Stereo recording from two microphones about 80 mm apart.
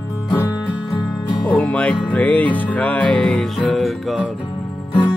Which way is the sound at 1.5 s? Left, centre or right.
Centre.